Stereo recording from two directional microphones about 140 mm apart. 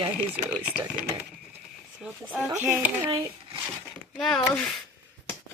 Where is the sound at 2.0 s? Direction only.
10° right (ahead or behind).